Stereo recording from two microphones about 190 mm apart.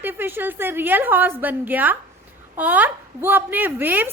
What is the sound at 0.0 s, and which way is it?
A woman's voice, 10° right (ahead or behind).